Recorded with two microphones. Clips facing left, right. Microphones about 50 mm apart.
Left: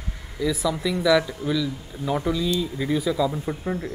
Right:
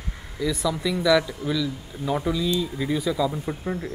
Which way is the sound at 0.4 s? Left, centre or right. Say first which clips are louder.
Left 1 dB; centre.